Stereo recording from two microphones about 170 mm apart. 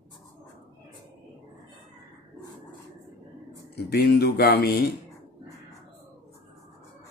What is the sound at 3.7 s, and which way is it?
Speech, 70° left (ahead or behind).